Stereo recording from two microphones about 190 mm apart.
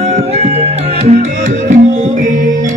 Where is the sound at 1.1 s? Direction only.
40° right (ahead or behind).